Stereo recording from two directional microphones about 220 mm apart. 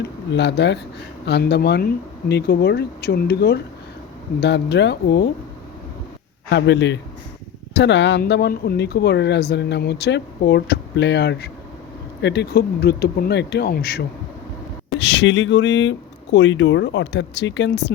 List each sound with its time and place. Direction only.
0.0 s speech: 50° left (ahead or behind)
6.5 s speech: 50° left (ahead or behind)